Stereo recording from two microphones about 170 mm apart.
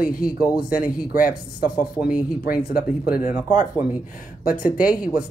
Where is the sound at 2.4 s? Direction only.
60° left (ahead or behind).